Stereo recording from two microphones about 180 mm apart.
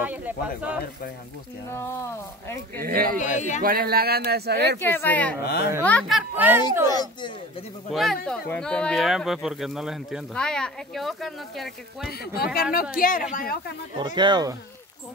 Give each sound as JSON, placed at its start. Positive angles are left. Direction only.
{"t": 0.0, "sound": "speech", "side_deg": -10}
{"t": 1.7, "sound": "speech", "side_deg": 15}
{"t": 2.8, "sound": "speech", "side_deg": -55}
{"t": 3.2, "sound": "speech", "side_deg": 45}
{"t": 3.6, "sound": "speech", "side_deg": -55}
{"t": 4.7, "sound": "speech", "side_deg": 10}
{"t": 5.4, "sound": "speech", "side_deg": 65}
{"t": 5.9, "sound": "speech", "side_deg": 5}
{"t": 6.3, "sound": "speech", "side_deg": -10}
{"t": 6.9, "sound": "speech", "side_deg": 25}
{"t": 7.9, "sound": "speech", "side_deg": 0}
{"t": 12.1, "sound": "speech", "side_deg": 60}
{"t": 13.9, "sound": "speech", "side_deg": -25}